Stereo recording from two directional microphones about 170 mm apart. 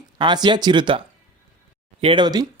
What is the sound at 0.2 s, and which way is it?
Speech, 25° right (ahead or behind).